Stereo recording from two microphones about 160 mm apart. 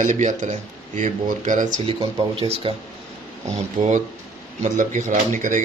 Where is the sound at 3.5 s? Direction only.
50° right (ahead or behind).